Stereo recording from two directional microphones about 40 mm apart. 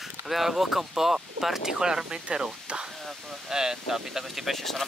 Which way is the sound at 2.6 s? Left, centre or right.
Centre.